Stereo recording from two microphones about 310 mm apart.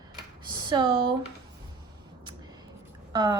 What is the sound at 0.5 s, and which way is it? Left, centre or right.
Speech, centre.